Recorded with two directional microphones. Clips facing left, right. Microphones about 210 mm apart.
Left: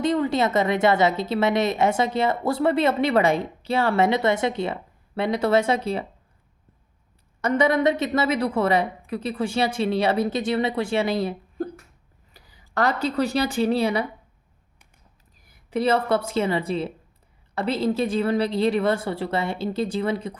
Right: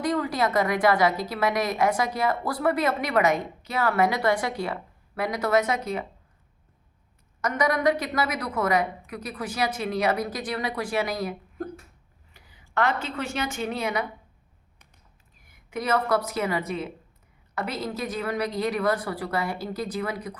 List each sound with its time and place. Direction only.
0.0 s a woman's voice: 25° left (ahead or behind)
7.4 s a woman's voice: 25° left (ahead or behind)
15.4 s a woman's voice: 35° left (ahead or behind)